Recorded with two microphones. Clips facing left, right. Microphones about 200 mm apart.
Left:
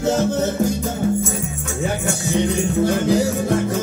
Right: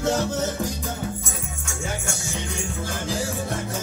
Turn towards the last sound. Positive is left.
turn(degrees=65)  # may be behind; listen again after turning